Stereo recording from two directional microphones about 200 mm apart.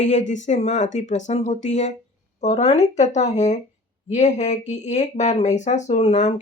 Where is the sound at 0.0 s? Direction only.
35° left (ahead or behind).